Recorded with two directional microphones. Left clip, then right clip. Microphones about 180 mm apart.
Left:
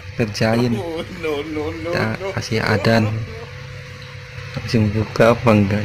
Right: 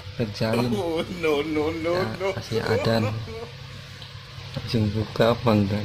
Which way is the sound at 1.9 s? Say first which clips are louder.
Left 4 dB; 15° left (ahead or behind).